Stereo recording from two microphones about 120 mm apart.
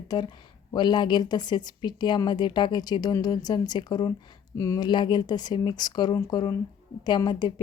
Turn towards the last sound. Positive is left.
turn(degrees=35)  # may be behind; listen again after turning